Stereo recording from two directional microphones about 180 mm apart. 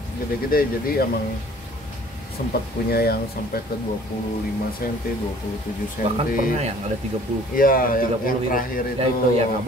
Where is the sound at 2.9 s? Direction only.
60° left (ahead or behind).